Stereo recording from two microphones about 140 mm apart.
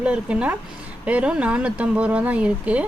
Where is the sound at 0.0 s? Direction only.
10° right (ahead or behind).